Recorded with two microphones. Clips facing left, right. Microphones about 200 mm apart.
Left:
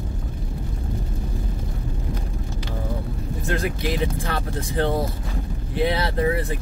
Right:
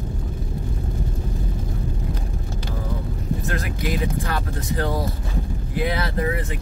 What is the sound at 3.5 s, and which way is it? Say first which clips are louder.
Speech: left 5 dB; 30° left (ahead or behind).